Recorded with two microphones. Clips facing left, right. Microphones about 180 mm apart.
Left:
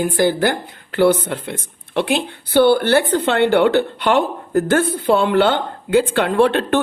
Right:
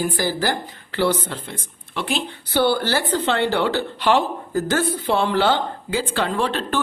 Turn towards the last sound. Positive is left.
turn(degrees=60)  # may be behind; listen again after turning